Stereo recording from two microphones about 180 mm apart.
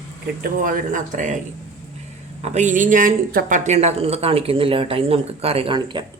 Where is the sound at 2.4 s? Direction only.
40° right (ahead or behind).